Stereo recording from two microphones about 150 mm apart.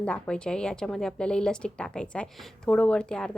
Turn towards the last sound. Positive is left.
turn(degrees=5)  # may be behind; listen again after turning